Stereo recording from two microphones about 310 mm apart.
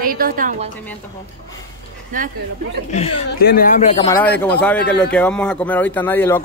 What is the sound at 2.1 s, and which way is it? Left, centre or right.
Speech, right.